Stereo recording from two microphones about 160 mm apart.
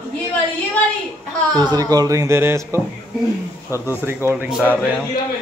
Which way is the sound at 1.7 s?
25° right (ahead or behind).